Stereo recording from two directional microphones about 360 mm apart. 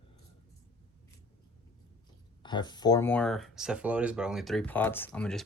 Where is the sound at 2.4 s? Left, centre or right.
Centre.